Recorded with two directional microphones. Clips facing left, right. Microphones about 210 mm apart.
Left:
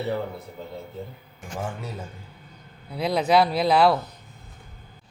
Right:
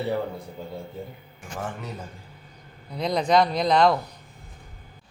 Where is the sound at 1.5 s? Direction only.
10° left (ahead or behind).